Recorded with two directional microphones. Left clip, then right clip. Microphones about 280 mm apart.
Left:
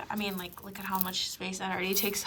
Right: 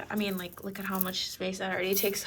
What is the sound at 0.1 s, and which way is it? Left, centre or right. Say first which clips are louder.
Speech: right 3 dB; centre.